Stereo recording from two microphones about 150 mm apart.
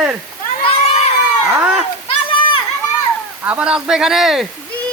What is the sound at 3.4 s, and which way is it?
Speech, 10° right (ahead or behind).